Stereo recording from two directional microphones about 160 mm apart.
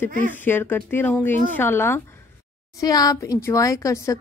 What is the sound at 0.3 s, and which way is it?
Speech, 15° left (ahead or behind).